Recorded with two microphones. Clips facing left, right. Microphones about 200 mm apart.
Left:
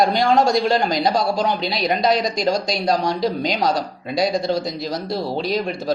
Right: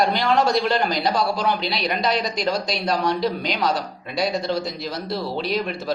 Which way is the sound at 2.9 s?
45° left (ahead or behind).